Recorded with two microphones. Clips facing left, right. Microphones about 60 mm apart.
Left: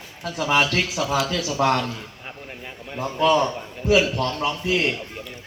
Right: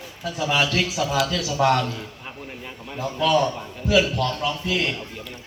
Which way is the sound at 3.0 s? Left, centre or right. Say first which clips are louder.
Left 1 dB; left.